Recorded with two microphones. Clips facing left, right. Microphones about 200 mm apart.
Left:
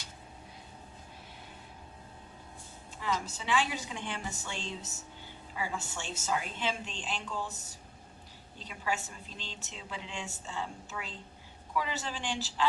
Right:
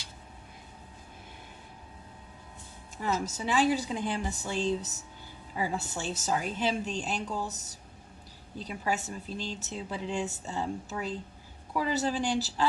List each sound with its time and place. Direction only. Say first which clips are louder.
3.2 s a woman's voice: right 8 dB; 40° right (ahead or behind)